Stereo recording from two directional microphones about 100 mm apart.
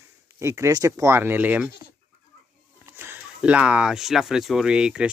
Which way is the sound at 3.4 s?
10° right (ahead or behind).